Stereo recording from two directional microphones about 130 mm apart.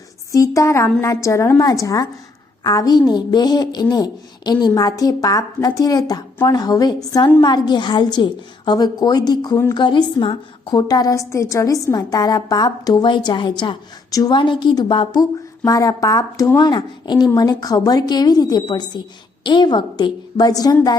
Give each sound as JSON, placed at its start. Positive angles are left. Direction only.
{"t": 0.3, "sound": "a woman's voice", "side_deg": 25}